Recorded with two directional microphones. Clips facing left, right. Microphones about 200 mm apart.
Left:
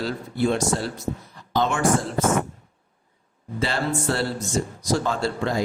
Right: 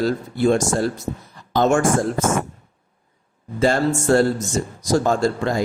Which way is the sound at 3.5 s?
45° right (ahead or behind).